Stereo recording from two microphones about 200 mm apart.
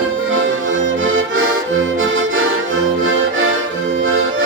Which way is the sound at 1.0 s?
80° right.